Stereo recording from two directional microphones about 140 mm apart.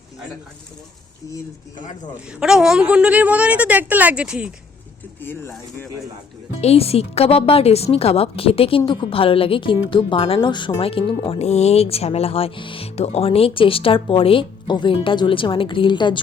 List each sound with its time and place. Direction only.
2.4 s a woman's voice: 5° right (ahead or behind)
5.2 s speech: 15° left (ahead or behind)
6.6 s a woman's voice: 45° left (ahead or behind)
11.3 s speech: 50° left (ahead or behind); by 16.2 s 35° left (ahead or behind)